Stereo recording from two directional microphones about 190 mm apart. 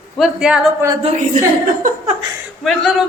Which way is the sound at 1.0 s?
35° right (ahead or behind).